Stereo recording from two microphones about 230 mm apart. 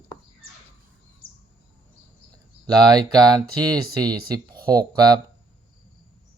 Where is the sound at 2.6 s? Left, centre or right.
Centre.